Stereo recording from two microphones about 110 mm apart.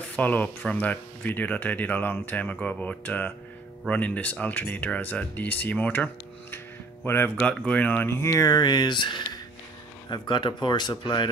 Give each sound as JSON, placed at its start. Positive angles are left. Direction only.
{"t": 0.1, "sound": "speech", "side_deg": 15}
{"t": 7.1, "sound": "speech", "side_deg": 20}